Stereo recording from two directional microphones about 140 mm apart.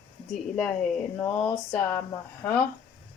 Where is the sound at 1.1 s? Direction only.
10° left (ahead or behind).